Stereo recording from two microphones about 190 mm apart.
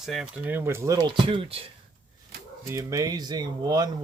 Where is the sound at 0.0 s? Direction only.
Centre (ahead or behind); by 1.7 s 30° right (ahead or behind).